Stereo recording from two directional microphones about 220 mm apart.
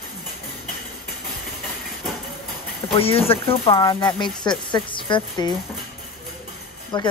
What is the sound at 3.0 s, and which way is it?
Speech, 25° left (ahead or behind).